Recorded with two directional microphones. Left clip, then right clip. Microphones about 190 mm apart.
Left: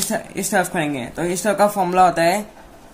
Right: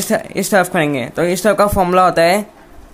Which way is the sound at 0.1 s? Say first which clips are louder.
Right 8 dB; 55° right (ahead or behind).